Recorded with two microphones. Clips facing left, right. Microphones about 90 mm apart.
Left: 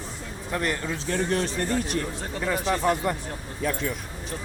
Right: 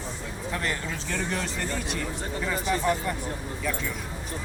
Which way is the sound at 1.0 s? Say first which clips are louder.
Left 6 dB; 40° left (ahead or behind).